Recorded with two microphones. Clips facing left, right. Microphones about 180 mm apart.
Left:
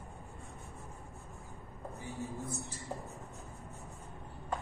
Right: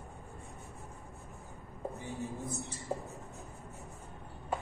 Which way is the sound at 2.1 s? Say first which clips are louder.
Left 2 dB; 15° right (ahead or behind).